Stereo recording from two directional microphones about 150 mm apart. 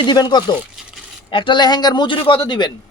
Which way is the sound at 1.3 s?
35° left (ahead or behind).